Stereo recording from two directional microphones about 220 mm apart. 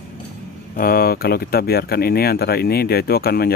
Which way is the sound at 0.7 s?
40° left (ahead or behind).